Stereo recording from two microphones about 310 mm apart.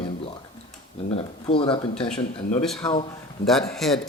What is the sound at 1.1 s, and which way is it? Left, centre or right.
Speech, centre.